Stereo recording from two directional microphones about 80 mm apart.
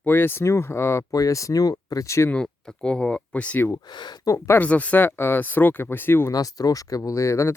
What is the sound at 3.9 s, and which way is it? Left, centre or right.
Speech, left.